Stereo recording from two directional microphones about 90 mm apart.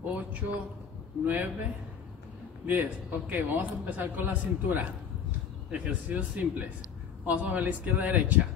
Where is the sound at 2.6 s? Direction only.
20° right (ahead or behind).